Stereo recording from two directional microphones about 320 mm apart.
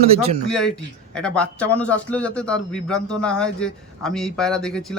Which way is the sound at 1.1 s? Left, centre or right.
Centre.